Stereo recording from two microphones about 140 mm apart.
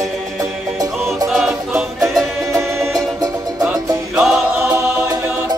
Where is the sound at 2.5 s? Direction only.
20° right (ahead or behind).